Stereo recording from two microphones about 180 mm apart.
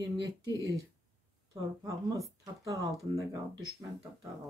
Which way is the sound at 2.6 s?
20° right (ahead or behind).